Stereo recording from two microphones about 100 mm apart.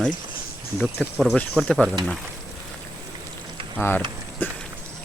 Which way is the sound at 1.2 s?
5° left (ahead or behind).